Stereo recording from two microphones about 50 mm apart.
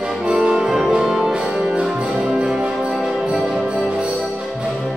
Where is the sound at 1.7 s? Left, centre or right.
Centre.